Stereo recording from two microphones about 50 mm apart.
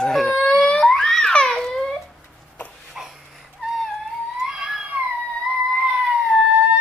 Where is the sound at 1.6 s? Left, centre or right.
Centre.